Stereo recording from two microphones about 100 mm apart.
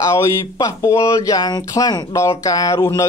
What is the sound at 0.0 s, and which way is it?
Speech, 30° left (ahead or behind).